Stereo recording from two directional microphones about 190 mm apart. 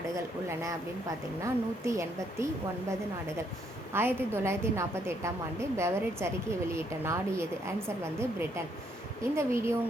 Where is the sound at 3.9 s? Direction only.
10° right (ahead or behind).